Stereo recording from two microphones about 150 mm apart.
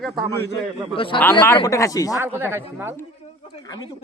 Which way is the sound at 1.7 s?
20° left (ahead or behind).